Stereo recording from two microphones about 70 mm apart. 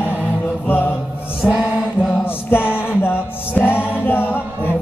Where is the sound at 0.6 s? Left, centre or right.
Left.